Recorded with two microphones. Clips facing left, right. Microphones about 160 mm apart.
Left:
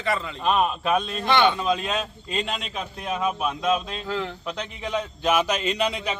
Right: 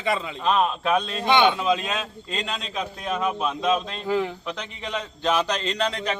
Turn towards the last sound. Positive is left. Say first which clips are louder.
# left 1 dB
turn(degrees=10)  # may be behind; listen again after turning